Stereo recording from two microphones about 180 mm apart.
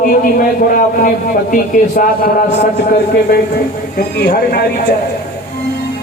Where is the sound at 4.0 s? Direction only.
60° left (ahead or behind).